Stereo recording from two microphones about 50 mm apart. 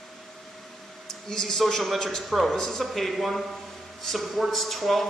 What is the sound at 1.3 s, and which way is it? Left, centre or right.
A man's voice, centre.